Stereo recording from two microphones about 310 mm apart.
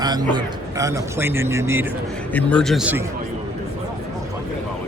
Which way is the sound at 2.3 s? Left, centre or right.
Centre.